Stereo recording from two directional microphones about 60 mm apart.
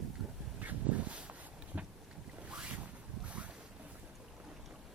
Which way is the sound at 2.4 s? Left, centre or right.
Centre.